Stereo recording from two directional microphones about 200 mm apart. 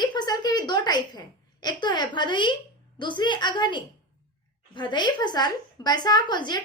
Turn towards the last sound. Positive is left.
turn(degrees=20)  # may be behind; listen again after turning